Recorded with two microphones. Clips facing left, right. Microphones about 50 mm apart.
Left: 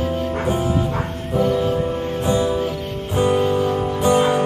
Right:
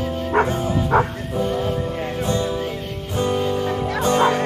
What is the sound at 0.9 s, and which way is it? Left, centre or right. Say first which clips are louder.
Music: right 7 dB; right.